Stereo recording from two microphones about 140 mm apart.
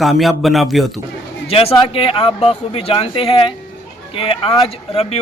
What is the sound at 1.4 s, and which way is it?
A man's voice, 45° left (ahead or behind).